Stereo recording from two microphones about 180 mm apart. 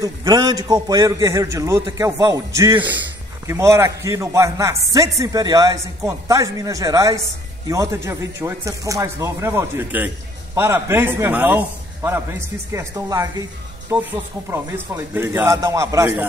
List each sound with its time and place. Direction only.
0.0 s a man's voice: 20° right (ahead or behind)